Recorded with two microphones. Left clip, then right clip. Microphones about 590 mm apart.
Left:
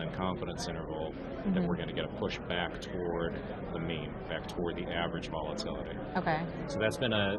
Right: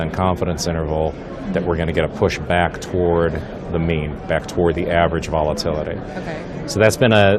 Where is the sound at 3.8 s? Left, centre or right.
Right.